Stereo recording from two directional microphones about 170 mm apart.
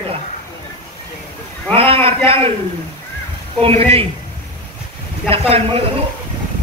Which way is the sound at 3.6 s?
35° right (ahead or behind).